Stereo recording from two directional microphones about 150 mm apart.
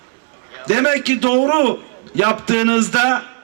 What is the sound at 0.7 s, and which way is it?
Speech, 30° left (ahead or behind).